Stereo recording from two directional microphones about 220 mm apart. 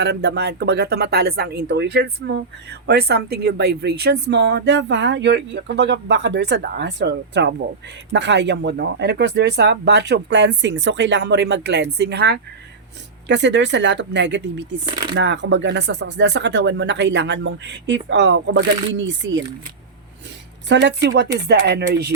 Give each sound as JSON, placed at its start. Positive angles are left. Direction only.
{"t": 0.0, "sound": "speech", "side_deg": -50}
{"t": 20.7, "sound": "speech", "side_deg": -50}